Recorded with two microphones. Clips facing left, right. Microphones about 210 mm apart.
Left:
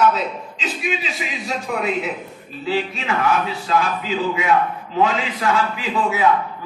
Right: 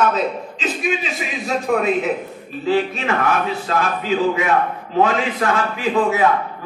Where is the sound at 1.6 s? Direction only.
45° right (ahead or behind).